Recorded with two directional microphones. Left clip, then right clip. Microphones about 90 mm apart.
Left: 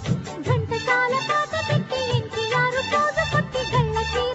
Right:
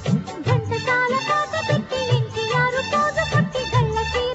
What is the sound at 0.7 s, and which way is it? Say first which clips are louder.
Music: even; 35° right (ahead or behind).